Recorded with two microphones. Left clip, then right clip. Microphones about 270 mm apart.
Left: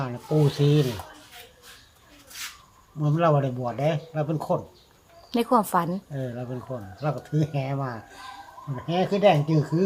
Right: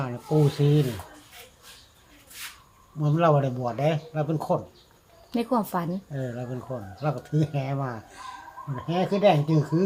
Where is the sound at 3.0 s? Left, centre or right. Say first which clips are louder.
Even; centre.